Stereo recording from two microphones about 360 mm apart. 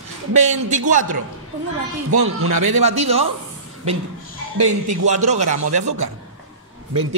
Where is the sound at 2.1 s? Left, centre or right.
Right.